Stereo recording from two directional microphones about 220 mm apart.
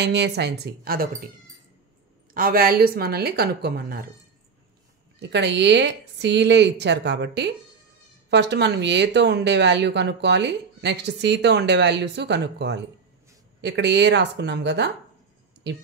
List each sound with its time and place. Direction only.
0.0 s speech: 50° right (ahead or behind)
2.3 s speech: 40° right (ahead or behind)
5.3 s speech: 50° right (ahead or behind)